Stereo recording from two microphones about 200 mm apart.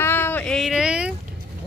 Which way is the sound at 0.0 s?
10° left (ahead or behind).